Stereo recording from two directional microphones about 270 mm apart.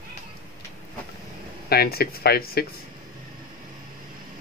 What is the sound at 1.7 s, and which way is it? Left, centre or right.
Speech, left.